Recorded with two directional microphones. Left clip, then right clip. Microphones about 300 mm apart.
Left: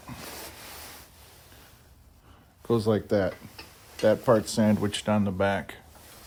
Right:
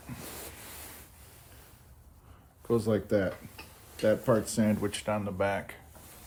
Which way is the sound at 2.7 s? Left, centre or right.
Left.